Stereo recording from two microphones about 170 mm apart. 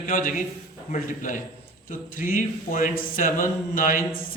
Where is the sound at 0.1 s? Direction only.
55° left (ahead or behind).